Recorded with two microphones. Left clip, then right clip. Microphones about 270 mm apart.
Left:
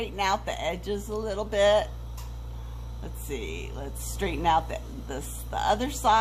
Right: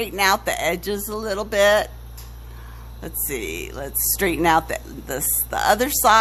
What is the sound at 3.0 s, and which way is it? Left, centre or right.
Speech, right.